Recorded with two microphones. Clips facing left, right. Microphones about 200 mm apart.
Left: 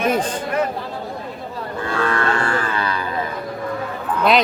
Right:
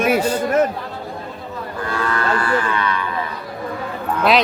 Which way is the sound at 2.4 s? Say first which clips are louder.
Right 2 dB; 35° left (ahead or behind).